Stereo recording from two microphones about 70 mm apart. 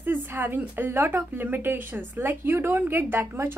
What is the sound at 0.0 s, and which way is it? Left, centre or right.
A woman's voice, right.